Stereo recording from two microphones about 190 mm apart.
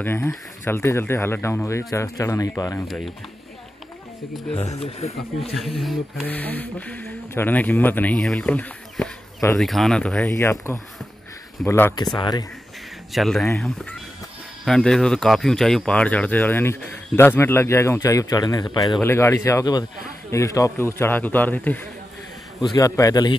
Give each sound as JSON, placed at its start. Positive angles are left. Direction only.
{"t": 0.0, "sound": "speech", "side_deg": 10}
{"t": 4.6, "sound": "speech", "side_deg": 35}
{"t": 5.6, "sound": "speech", "side_deg": 0}
{"t": 10.3, "sound": "speech", "side_deg": 15}
{"t": 13.1, "sound": "speech", "side_deg": 0}